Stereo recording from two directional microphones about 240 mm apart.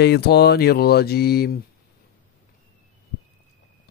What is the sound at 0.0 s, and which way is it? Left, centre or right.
Speech, left.